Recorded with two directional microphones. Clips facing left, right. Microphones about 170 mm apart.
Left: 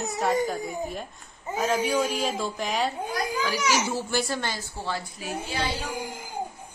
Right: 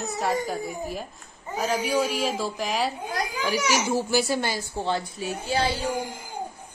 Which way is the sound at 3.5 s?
15° right (ahead or behind).